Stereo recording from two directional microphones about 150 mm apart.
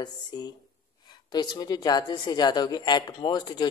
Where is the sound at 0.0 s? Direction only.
30° left (ahead or behind).